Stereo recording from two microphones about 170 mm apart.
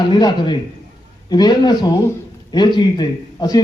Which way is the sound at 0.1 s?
25° left (ahead or behind).